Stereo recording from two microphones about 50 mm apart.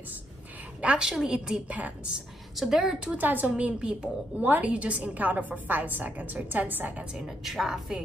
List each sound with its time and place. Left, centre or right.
0.7 s a woman's voice: centre
3.2 s a woman's voice: right
3.4 s a woman's voice: right
4.4 s a woman's voice: right
4.6 s a woman's voice: right
7.2 s a woman's voice: centre